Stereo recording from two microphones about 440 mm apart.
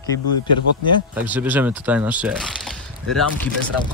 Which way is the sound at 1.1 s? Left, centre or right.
Centre.